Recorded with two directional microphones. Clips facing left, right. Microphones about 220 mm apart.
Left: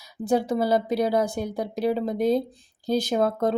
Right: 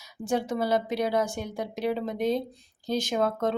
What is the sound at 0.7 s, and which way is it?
Speech, 35° left (ahead or behind).